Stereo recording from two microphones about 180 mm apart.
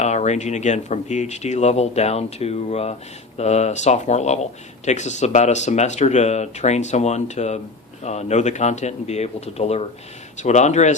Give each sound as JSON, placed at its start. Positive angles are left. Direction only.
{"t": 0.0, "sound": "speech", "side_deg": 40}